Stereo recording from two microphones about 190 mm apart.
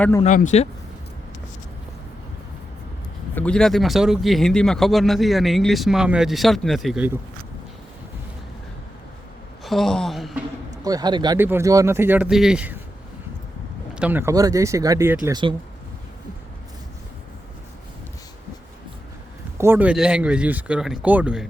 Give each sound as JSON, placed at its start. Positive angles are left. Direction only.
{"t": 0.2, "sound": "speech", "side_deg": 40}
{"t": 3.3, "sound": "speech", "side_deg": 5}
{"t": 9.6, "sound": "speech", "side_deg": 0}
{"t": 10.8, "sound": "speech", "side_deg": -20}
{"t": 11.3, "sound": "speech", "side_deg": -10}
{"t": 13.9, "sound": "speech", "side_deg": -10}
{"t": 15.3, "sound": "speech", "side_deg": -25}
{"t": 19.5, "sound": "speech", "side_deg": -10}